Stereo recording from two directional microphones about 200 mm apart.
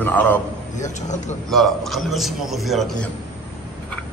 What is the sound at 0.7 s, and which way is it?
Speech, 35° left (ahead or behind).